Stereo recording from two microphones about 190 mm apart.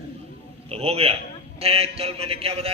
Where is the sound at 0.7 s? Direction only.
30° right (ahead or behind).